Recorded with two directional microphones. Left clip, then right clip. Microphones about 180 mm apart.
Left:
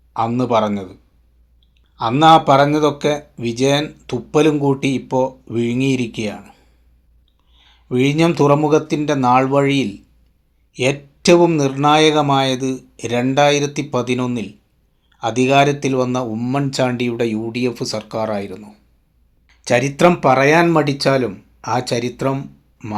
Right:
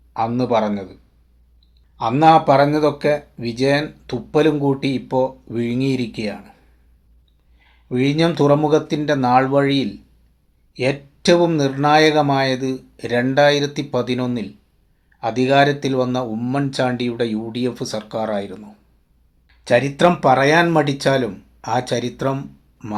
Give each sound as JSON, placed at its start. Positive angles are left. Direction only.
{"t": 0.1, "sound": "speech", "side_deg": 25}
{"t": 2.0, "sound": "speech", "side_deg": 30}
{"t": 7.6, "sound": "speech", "side_deg": 30}